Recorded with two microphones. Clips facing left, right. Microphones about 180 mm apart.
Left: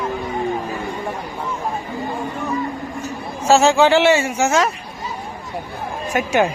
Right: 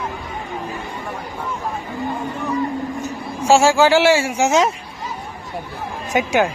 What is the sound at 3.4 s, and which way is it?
Speech, 10° right (ahead or behind).